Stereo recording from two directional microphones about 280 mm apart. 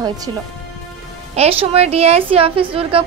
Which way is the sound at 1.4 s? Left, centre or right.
Right.